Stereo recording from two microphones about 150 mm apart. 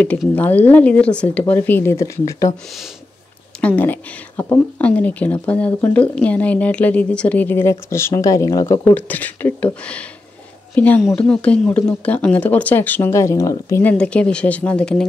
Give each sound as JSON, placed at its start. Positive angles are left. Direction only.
{"t": 0.4, "sound": "speech", "side_deg": 10}
{"t": 3.6, "sound": "speech", "side_deg": 10}
{"t": 10.7, "sound": "a woman's voice", "side_deg": 10}
{"t": 13.8, "sound": "speech", "side_deg": 10}